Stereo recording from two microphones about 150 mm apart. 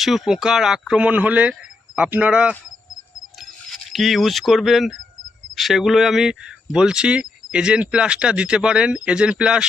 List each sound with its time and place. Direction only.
0.0 s speech: centre (ahead or behind)